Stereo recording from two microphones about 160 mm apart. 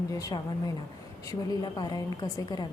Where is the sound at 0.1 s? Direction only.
20° left (ahead or behind).